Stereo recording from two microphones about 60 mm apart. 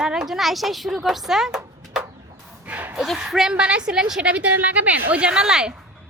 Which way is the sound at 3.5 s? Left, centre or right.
Centre.